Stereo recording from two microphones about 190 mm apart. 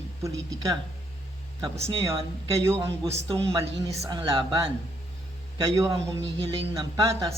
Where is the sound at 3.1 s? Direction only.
35° right (ahead or behind).